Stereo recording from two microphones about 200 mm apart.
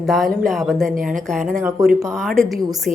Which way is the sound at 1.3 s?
Centre (ahead or behind).